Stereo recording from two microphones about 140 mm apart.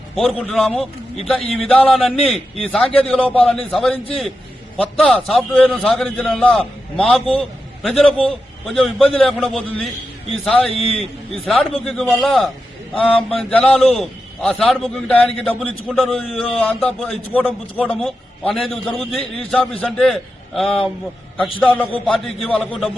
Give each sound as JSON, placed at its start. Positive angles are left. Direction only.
{"t": 0.2, "sound": "a man's voice", "side_deg": 0}
{"t": 10.7, "sound": "a man's voice", "side_deg": 45}
{"t": 10.9, "sound": "a man's voice", "side_deg": 0}